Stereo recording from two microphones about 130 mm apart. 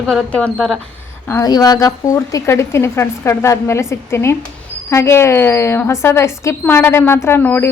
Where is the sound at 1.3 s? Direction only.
30° left (ahead or behind).